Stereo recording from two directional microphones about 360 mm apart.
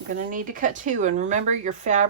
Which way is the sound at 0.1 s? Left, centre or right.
Right.